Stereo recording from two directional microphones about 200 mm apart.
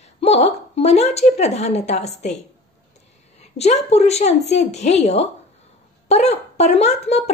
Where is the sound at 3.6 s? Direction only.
35° left (ahead or behind).